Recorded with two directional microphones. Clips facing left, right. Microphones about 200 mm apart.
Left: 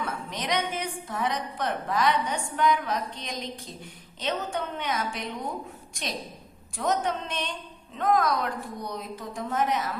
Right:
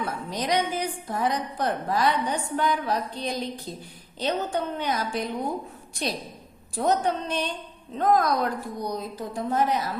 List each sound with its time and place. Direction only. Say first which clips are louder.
0.0 s a woman's voice: right 3 dB; 35° right (ahead or behind)